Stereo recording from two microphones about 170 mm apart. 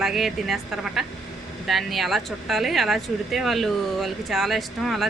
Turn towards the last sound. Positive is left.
turn(degrees=0)  # may be behind; listen again after turning